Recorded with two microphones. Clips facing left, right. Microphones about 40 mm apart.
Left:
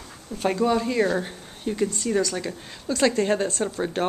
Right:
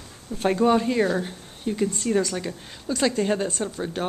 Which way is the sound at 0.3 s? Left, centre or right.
Centre.